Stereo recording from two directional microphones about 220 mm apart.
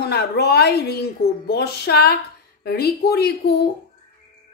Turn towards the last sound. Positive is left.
turn(degrees=45)  # may be behind; listen again after turning